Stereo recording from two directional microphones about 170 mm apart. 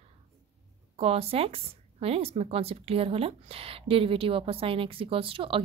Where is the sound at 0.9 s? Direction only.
35° right (ahead or behind).